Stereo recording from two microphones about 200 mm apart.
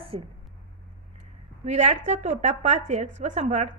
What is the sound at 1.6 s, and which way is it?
A woman's voice, 35° right (ahead or behind).